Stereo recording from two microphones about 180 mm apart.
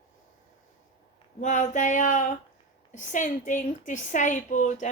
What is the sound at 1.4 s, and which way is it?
A woman's voice, 45° left (ahead or behind).